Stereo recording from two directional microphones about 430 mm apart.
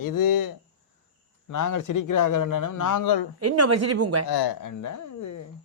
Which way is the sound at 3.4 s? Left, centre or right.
Right.